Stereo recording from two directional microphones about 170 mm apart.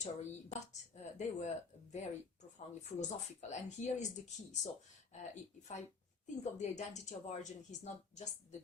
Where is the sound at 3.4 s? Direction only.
40° left (ahead or behind).